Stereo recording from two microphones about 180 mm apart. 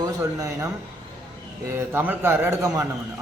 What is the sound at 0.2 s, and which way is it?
Speech, 15° right (ahead or behind).